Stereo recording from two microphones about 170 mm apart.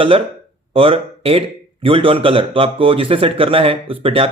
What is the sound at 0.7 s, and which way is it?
Speech, 35° right (ahead or behind).